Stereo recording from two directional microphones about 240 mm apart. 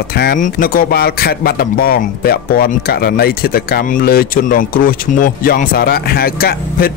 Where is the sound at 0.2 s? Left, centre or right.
Left.